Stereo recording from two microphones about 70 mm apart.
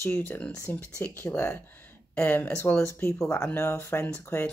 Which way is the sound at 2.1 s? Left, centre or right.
Left.